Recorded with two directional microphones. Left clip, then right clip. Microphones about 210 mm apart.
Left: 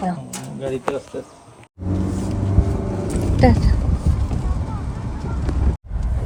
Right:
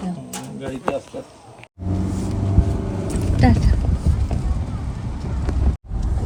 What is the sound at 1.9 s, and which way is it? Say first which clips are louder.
Vehicle: left 2 dB; centre (ahead or behind).